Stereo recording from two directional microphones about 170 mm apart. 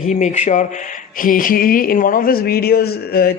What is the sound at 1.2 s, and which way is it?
A man's voice, 55° left (ahead or behind).